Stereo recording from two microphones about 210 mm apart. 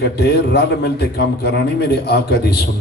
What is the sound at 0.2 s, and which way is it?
A man's voice, 50° left (ahead or behind).